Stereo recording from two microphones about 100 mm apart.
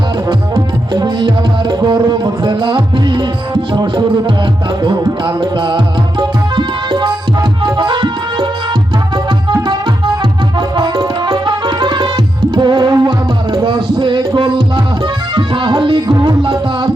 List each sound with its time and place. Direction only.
0.9 s music: 45° right (ahead or behind)
10.8 s music: 45° right (ahead or behind)
16.4 s music: 55° right (ahead or behind)